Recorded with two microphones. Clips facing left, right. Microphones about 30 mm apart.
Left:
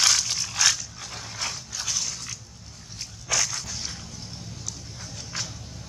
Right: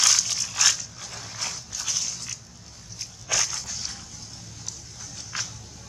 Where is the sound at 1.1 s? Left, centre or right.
Left.